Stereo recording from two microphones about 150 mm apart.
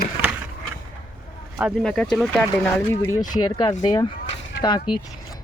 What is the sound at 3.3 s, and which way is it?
Speech, 25° left (ahead or behind).